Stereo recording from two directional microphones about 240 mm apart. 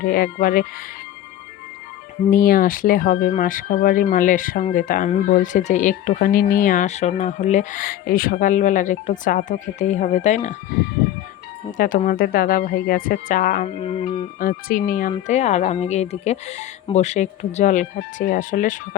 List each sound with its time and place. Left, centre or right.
0.0 s speech: left
2.3 s speech: left
11.8 s speech: left
13.7 s speech: left